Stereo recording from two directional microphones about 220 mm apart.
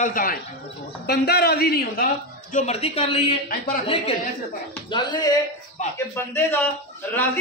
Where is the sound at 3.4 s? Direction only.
40° left (ahead or behind).